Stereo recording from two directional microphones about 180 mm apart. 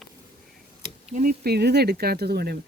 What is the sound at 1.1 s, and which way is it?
Speech, 45° right (ahead or behind).